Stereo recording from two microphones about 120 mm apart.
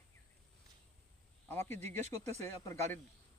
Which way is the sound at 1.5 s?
20° left (ahead or behind).